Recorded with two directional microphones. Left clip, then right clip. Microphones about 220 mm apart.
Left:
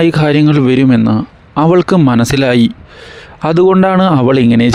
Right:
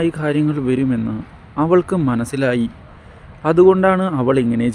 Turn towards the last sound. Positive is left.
turn(degrees=45)  # may be behind; listen again after turning